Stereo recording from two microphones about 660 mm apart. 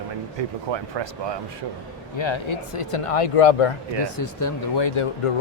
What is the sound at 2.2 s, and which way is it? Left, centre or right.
Speech, left.